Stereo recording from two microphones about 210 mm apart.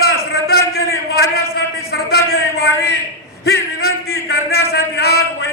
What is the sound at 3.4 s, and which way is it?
A man's voice, 50° left (ahead or behind).